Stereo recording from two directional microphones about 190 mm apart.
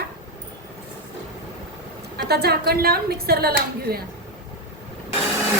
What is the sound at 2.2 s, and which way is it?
Speech, 55° right (ahead or behind).